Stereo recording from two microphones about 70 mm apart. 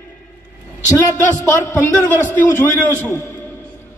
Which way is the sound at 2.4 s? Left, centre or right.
Left.